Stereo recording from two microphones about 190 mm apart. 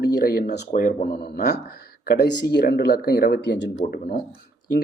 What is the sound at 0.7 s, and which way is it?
Speech, 45° left (ahead or behind).